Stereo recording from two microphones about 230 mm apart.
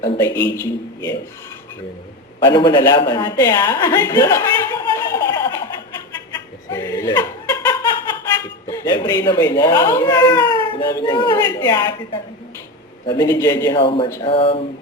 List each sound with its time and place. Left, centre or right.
0.0 s speech: centre
2.4 s a woman's voice: centre
6.7 s a sound: centre
8.7 s speech: centre